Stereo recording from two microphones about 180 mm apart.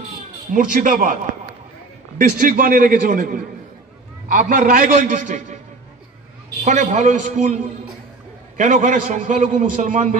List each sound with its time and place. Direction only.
0.5 s a man's voice: 45° right (ahead or behind)
2.1 s a man's voice: 50° right (ahead or behind)
6.6 s a man's voice: 45° right (ahead or behind)